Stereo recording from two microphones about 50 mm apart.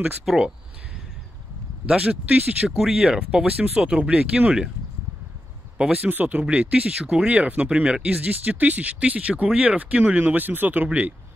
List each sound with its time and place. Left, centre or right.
0.2 s speech: centre
1.9 s speech: right
2.7 s speech: centre
5.8 s speech: right
6.0 s speech: right
7.0 s speech: centre
7.2 s speech: right
10.2 s speech: right